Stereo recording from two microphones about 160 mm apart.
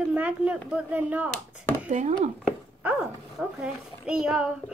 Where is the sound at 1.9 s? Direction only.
45° right (ahead or behind).